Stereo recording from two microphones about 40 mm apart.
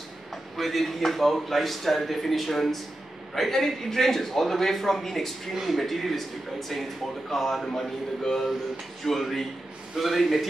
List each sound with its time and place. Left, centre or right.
0.6 s a man's voice: centre